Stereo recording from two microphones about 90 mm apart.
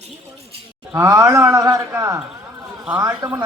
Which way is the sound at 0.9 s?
40° right (ahead or behind).